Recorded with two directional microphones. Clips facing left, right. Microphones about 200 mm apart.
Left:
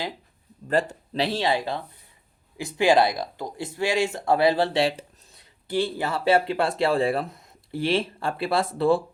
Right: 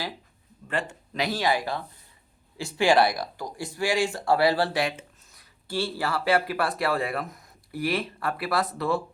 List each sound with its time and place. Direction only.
0.7 s speech: 35° left (ahead or behind)